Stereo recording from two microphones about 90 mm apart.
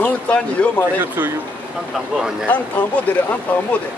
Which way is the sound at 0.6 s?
15° left (ahead or behind).